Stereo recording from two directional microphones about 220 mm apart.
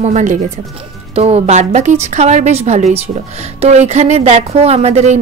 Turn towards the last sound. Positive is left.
turn(degrees=-30)  # may be behind; listen again after turning